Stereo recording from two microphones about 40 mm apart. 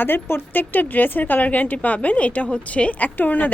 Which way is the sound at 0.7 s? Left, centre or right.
Left.